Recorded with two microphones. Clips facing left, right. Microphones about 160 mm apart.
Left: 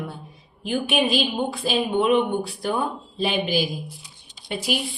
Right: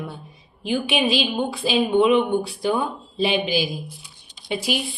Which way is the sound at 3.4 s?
50° left (ahead or behind).